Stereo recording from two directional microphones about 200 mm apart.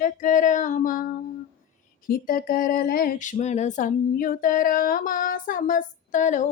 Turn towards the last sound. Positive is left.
turn(degrees=40)  # may be behind; listen again after turning